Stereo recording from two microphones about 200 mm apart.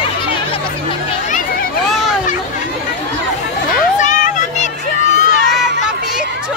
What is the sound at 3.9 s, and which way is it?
Crowd, 35° left (ahead or behind).